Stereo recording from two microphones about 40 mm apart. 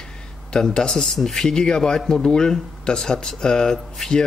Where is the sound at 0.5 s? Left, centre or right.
Centre.